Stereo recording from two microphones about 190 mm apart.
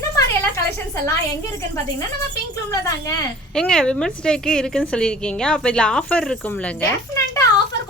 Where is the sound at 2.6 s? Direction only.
15° left (ahead or behind).